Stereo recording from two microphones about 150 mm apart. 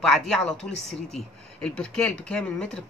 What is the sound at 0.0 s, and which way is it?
Speech, centre (ahead or behind).